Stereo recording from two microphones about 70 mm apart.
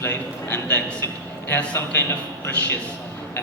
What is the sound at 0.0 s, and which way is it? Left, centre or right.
A man's voice, left.